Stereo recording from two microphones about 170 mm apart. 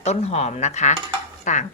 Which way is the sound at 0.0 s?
40° left (ahead or behind).